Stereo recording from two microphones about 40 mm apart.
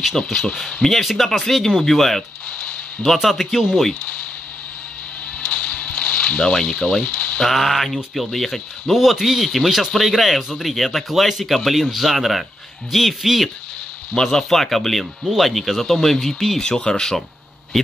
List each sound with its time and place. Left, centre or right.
0.8 s speech: centre
5.4 s a sound: left
7.4 s speech: centre
14.1 s speech: centre
16.6 s speech: left